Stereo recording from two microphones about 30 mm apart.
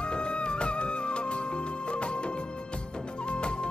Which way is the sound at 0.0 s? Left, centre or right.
Left.